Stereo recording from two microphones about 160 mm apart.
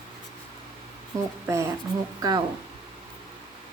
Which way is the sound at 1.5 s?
20° right (ahead or behind).